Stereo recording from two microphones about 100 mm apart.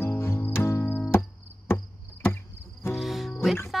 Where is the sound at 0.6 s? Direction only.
25° left (ahead or behind).